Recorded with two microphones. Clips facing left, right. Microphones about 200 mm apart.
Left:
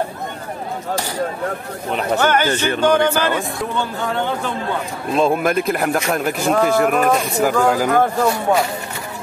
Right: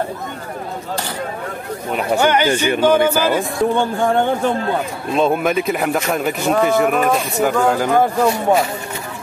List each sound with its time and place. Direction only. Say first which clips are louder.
2.0 s speech: right 2 dB; 15° right (ahead or behind)
3.7 s speech: right 4 dB; 50° right (ahead or behind)
5.1 s speech: even; centre (ahead or behind)
7.9 s speech: right 1 dB; 10° right (ahead or behind)